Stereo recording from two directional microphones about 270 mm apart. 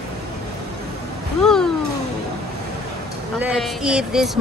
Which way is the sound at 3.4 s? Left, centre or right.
Centre.